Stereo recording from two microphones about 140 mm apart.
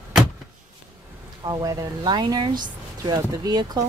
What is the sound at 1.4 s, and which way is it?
Speech, 30° right (ahead or behind).